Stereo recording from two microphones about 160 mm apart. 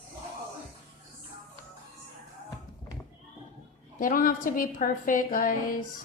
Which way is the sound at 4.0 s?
60° left (ahead or behind).